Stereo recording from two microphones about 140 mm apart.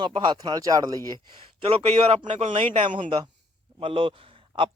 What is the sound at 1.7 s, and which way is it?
A man's voice, 40° right (ahead or behind).